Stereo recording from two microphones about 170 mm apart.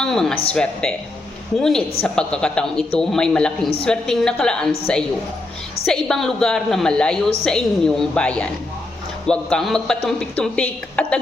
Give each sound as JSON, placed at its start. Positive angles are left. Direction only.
{"t": 0.0, "sound": "a woman's voice", "side_deg": 5}
{"t": 5.8, "sound": "a woman's voice", "side_deg": 5}